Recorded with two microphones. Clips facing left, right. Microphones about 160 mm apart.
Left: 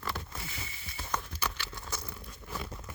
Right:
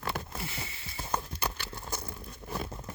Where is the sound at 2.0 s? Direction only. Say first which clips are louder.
Right 3 dB; 25° right (ahead or behind).